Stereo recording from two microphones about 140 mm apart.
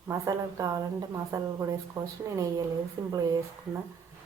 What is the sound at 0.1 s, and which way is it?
A woman's voice, 20° right (ahead or behind).